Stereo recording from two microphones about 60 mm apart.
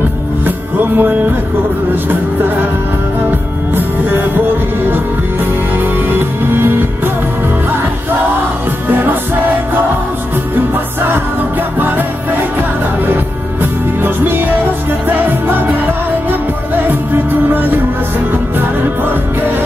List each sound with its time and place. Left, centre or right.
0.7 s music: right
4.9 s music: right
13.0 s music: right
16.8 s music: right